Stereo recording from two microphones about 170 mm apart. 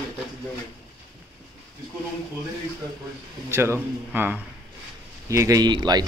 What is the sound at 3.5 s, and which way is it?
Speech, 15° right (ahead or behind).